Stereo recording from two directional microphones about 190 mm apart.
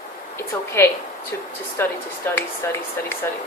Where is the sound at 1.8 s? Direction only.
10° left (ahead or behind).